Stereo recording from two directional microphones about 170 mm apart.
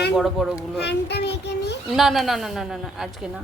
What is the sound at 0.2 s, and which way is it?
Speech, 5° right (ahead or behind).